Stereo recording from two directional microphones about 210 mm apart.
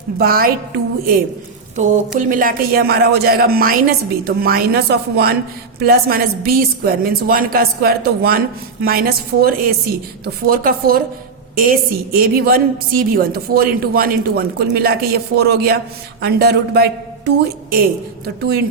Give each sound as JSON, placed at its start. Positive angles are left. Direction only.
{"t": 0.2, "sound": "a woman's voice", "side_deg": -45}
{"t": 1.7, "sound": "a woman's voice", "side_deg": -35}